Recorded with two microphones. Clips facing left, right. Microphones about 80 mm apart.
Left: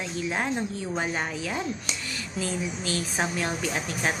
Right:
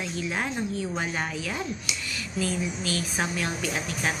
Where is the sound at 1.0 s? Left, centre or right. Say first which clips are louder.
Left 1 dB; left.